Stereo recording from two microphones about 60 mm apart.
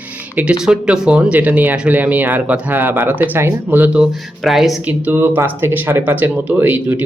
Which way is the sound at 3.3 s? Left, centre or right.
Right.